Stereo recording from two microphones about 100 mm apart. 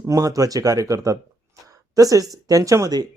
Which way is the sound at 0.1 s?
35° right (ahead or behind).